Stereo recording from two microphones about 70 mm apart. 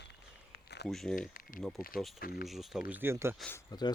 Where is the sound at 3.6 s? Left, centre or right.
Left.